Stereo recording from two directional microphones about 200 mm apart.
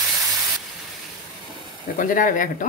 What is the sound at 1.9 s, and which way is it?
Speech, 40° left (ahead or behind).